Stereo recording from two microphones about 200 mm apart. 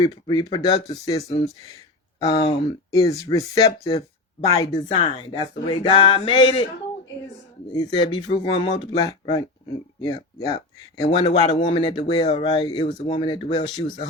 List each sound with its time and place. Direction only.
0.0 s speech: 20° left (ahead or behind)
2.9 s speech: 20° left (ahead or behind)
7.7 s speech: 20° left (ahead or behind)